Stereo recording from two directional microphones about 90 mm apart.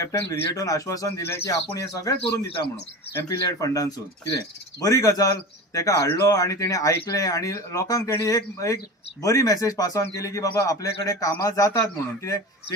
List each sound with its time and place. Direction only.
0.0 s speech: 35° left (ahead or behind)
3.1 s speech: 30° left (ahead or behind)
3.3 s speech: 40° left (ahead or behind)